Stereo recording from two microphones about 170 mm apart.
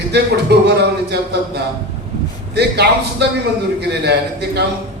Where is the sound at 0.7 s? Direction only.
75° right (ahead or behind).